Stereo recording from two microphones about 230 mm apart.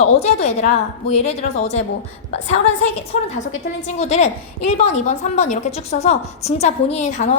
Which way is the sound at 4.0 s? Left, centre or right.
Left.